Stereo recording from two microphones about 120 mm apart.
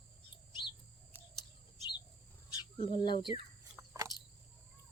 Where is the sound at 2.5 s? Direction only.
40° left (ahead or behind).